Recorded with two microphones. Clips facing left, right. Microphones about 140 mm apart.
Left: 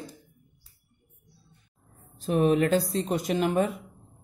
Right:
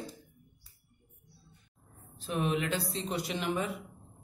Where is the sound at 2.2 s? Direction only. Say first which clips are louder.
Left 9 dB; 40° left (ahead or behind).